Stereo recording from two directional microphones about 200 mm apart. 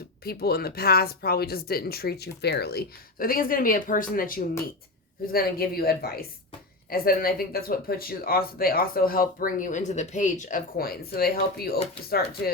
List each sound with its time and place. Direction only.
0.3 s speech: 50° left (ahead or behind)